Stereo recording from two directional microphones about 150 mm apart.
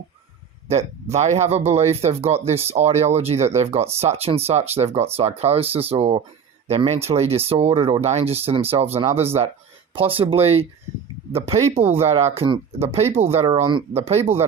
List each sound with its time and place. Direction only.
0.7 s speech: 45° right (ahead or behind)